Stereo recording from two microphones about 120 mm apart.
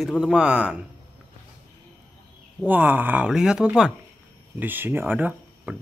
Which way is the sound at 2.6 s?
15° right (ahead or behind).